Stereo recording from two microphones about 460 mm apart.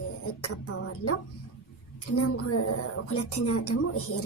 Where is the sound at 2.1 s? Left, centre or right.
Left.